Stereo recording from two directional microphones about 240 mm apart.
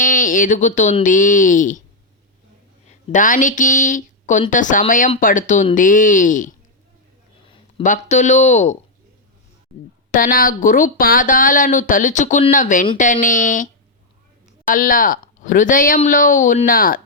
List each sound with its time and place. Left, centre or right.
0.0 s speech: left
2.8 s speech: left
10.1 s speech: left
14.7 s speech: left